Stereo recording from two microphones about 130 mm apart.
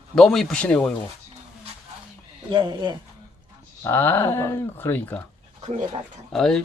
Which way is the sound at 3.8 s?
15° left (ahead or behind).